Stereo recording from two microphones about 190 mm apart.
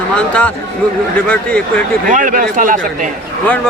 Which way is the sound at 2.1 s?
45° right (ahead or behind).